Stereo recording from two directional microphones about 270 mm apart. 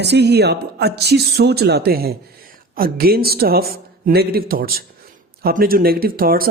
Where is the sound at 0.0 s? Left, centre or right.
Right.